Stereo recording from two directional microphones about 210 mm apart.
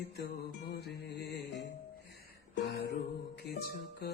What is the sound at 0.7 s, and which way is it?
Music, 50° left (ahead or behind).